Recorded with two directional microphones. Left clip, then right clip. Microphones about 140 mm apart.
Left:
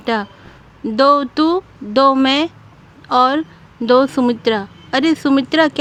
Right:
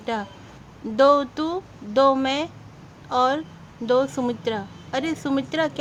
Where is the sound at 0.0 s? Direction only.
40° left (ahead or behind).